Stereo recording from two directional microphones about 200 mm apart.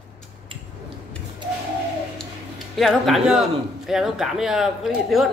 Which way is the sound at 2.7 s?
Centre (ahead or behind).